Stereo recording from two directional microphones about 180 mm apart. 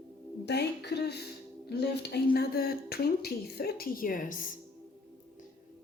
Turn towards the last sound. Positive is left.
turn(degrees=50)  # may be behind; listen again after turning